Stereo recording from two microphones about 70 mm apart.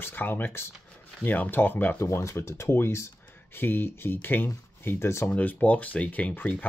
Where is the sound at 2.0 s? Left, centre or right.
Left.